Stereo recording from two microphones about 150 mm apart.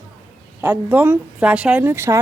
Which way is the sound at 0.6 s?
10° right (ahead or behind).